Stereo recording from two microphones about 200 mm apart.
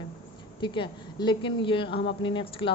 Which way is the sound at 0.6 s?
25° left (ahead or behind).